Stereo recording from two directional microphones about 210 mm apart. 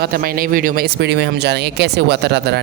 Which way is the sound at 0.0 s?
45° right (ahead or behind).